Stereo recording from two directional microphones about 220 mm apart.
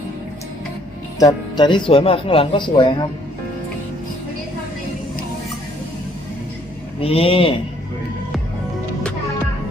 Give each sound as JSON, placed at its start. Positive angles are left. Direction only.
{"t": 1.2, "sound": "speech", "side_deg": 20}
{"t": 7.0, "sound": "speech", "side_deg": 25}